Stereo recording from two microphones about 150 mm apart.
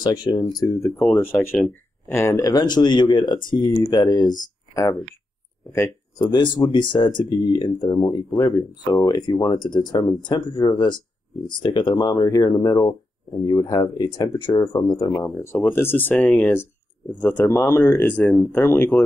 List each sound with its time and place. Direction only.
0.0 s speech: 25° left (ahead or behind)
0.8 s speech: centre (ahead or behind)
1.2 s speech: 15° left (ahead or behind)
6.1 s speech: 30° left (ahead or behind)